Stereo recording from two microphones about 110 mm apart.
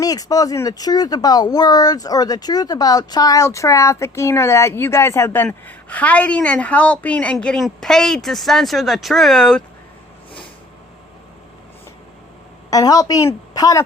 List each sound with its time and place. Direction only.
0.0 s speech: 35° left (ahead or behind); by 9.6 s 5° left (ahead or behind)
12.7 s a woman's voice: 35° left (ahead or behind)